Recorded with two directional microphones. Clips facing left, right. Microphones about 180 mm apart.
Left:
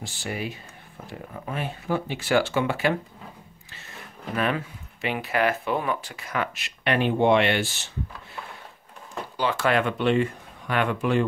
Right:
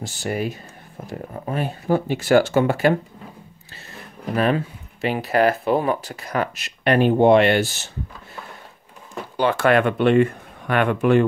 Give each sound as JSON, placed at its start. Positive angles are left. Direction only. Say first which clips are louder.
{"t": 0.0, "sound": "speech", "louder": "right 7 dB", "side_deg": -45}
{"t": 4.4, "sound": "speech", "louder": "right 6 dB", "side_deg": -35}
{"t": 9.4, "sound": "speech", "louder": "right 6 dB", "side_deg": -55}